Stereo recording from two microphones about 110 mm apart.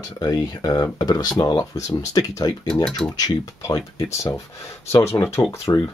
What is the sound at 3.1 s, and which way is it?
Speech, 35° left (ahead or behind).